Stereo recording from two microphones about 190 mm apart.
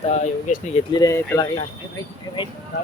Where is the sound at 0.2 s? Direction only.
40° left (ahead or behind).